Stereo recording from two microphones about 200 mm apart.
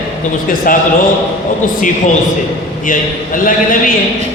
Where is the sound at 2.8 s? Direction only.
40° left (ahead or behind).